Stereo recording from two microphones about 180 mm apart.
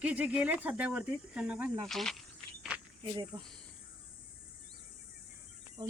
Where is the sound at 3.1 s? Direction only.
25° right (ahead or behind).